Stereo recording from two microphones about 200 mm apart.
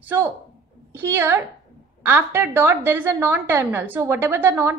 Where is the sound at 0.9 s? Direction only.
10° right (ahead or behind).